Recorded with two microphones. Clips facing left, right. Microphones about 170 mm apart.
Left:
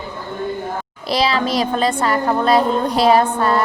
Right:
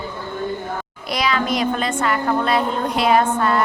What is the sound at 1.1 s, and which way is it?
Speech, 30° left (ahead or behind).